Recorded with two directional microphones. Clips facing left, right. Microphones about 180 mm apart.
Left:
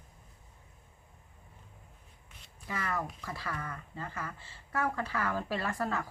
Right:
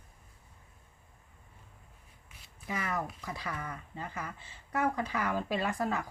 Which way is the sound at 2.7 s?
20° right (ahead or behind).